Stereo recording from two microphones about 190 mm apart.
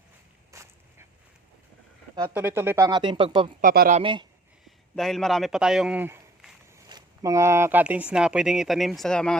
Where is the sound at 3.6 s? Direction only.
50° right (ahead or behind).